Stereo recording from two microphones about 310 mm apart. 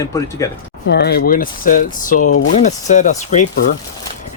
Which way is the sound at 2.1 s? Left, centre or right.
Left.